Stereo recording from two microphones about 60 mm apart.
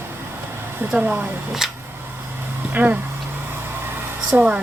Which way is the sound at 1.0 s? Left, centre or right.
Right.